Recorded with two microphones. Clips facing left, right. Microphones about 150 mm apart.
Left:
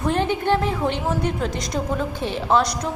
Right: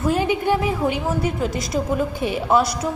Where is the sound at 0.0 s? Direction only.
5° right (ahead or behind).